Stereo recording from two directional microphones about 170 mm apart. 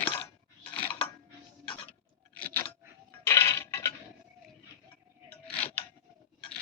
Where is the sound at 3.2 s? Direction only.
15° left (ahead or behind).